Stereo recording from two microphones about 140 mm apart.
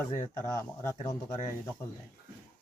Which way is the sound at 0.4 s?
20° left (ahead or behind).